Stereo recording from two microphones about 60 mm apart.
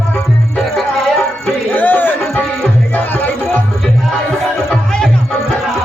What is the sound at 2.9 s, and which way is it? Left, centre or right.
Music, left.